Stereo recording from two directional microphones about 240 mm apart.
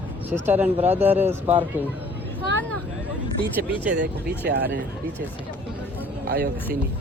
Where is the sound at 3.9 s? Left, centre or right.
Right.